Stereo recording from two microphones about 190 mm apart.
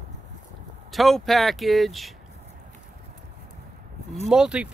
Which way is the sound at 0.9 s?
Centre (ahead or behind).